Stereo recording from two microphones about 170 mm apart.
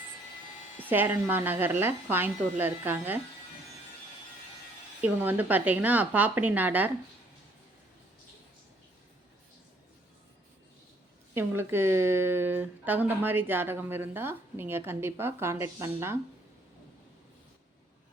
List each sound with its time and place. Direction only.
0.9 s speech: 10° right (ahead or behind)
4.9 s speech: 10° right (ahead or behind)
11.3 s speech: 15° right (ahead or behind)